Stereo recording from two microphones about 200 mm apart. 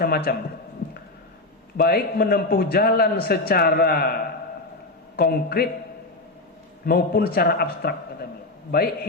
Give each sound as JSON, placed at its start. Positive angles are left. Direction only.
{"t": 0.3, "sound": "a man's voice", "side_deg": 50}
{"t": 1.7, "sound": "a man's voice", "side_deg": 50}
{"t": 6.8, "sound": "a man's voice", "side_deg": 50}